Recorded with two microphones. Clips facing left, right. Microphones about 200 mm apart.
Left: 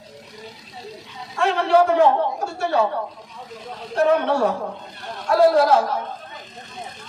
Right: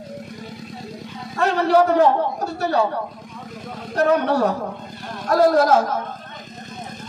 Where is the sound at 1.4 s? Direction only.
40° right (ahead or behind).